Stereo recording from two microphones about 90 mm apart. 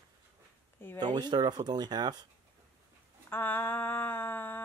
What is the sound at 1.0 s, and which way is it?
Speech, 55° right (ahead or behind).